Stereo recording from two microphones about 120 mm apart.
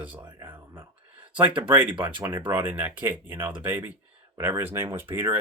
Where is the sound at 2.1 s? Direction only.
40° right (ahead or behind).